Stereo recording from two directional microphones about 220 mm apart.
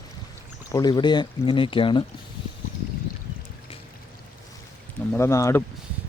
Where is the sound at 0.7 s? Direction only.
20° left (ahead or behind).